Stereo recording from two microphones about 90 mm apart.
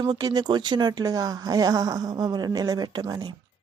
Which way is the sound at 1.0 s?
45° right (ahead or behind).